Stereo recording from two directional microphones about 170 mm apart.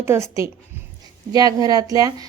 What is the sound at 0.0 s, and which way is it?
A woman's voice, 15° right (ahead or behind).